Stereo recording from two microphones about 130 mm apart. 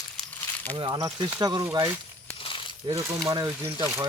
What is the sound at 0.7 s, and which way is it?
Speech, 40° right (ahead or behind).